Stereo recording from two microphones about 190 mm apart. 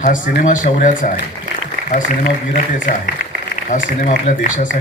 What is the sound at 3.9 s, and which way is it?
Speech, 40° left (ahead or behind).